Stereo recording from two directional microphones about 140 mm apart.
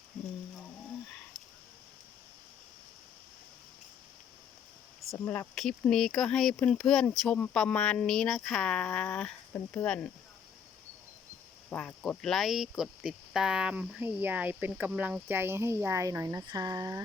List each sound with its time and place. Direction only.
5.1 s speech: 15° left (ahead or behind)
5.5 s speech: 5° left (ahead or behind)
11.7 s speech: 5° left (ahead or behind); by 17.0 s 25° right (ahead or behind)